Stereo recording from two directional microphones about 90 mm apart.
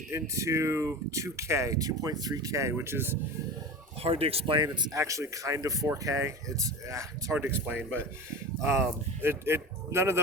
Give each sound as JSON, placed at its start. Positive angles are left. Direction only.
{"t": 0.1, "sound": "speech", "side_deg": -35}
{"t": 4.0, "sound": "speech", "side_deg": -90}
{"t": 4.9, "sound": "speech", "side_deg": -35}
{"t": 7.3, "sound": "speech", "side_deg": -20}